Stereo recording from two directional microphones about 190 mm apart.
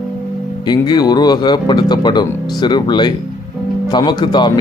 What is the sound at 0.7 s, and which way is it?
Speech, 20° left (ahead or behind).